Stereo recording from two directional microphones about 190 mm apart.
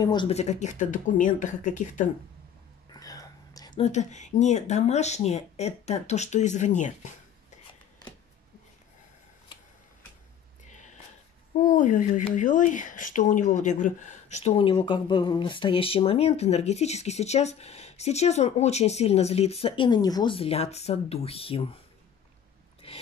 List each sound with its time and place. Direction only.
0.0 s a child's voice: 25° left (ahead or behind); by 2.0 s 40° left (ahead or behind)
2.9 s whispering: 20° left (ahead or behind)
3.8 s a child's voice: 40° left (ahead or behind)
11.5 s a child's voice: 45° left (ahead or behind)
22.8 s a sound: 30° left (ahead or behind)